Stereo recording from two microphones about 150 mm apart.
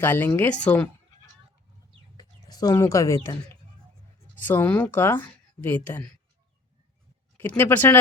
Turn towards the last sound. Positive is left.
turn(degrees=15)  # may be behind; listen again after turning